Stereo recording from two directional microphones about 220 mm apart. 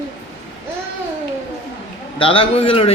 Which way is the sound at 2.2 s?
25° left (ahead or behind).